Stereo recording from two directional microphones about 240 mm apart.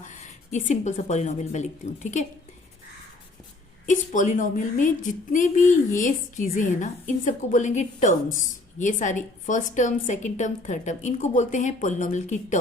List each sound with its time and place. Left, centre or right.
0.0 s a woman's voice: left
3.8 s a woman's voice: left